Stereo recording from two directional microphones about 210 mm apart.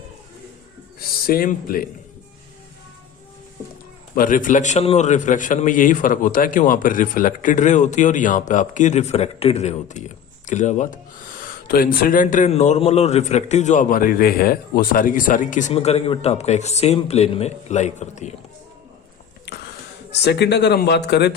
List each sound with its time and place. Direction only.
0.9 s a man's voice: 45° left (ahead or behind)
4.1 s a man's voice: 40° left (ahead or behind)
20.1 s speech: 55° left (ahead or behind)